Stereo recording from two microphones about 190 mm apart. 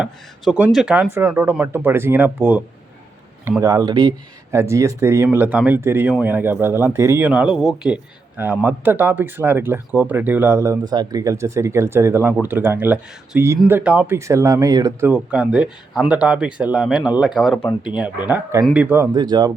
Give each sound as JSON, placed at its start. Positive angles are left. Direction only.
{"t": 0.0, "sound": "speech", "side_deg": -5}
{"t": 3.6, "sound": "speech", "side_deg": -20}
{"t": 17.6, "sound": "speech", "side_deg": 15}
{"t": 17.9, "sound": "speech", "side_deg": -10}